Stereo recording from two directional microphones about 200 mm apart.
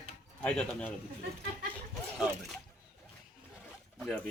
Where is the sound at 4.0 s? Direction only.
Centre (ahead or behind).